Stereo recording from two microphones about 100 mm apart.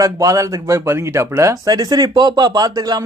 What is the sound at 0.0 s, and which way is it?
Speech, 35° right (ahead or behind).